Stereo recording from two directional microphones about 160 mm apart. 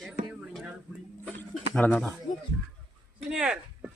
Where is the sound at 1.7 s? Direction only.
5° left (ahead or behind).